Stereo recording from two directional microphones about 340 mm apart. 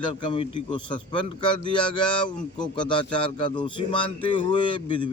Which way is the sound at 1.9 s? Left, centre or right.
Centre.